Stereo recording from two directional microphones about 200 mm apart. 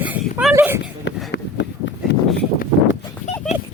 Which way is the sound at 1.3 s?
60° left (ahead or behind).